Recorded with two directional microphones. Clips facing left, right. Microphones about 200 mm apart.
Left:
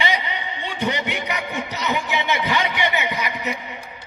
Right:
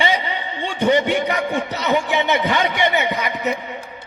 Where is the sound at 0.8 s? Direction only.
50° right (ahead or behind).